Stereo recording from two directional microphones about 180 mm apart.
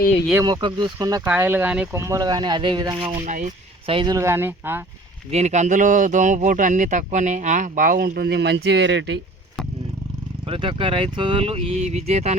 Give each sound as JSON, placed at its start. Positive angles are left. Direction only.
{"t": 0.4, "sound": "speech", "side_deg": -25}
{"t": 1.2, "sound": "speech", "side_deg": -10}
{"t": 3.2, "sound": "speech", "side_deg": -40}
{"t": 3.9, "sound": "speech", "side_deg": -20}
{"t": 5.3, "sound": "speech", "side_deg": -40}
{"t": 10.4, "sound": "speech", "side_deg": -30}